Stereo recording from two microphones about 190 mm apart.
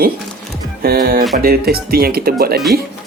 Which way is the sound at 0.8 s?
50° right (ahead or behind).